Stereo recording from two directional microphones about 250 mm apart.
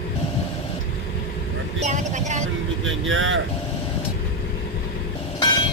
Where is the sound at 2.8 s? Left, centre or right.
Right.